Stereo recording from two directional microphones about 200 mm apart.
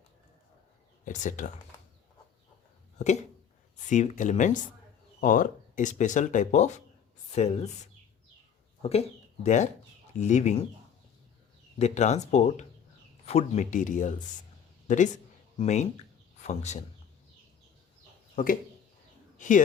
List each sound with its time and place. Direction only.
1.0 s speech: 40° left (ahead or behind)
3.0 s speech: 35° left (ahead or behind)
8.8 s speech: 30° left (ahead or behind)
11.8 s speech: 35° left (ahead or behind)
14.8 s a sound: 40° left (ahead or behind)
16.5 s speech: 35° left (ahead or behind)
18.4 s speech: 40° left (ahead or behind)